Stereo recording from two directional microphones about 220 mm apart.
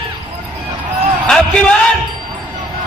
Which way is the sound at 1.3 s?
Centre (ahead or behind).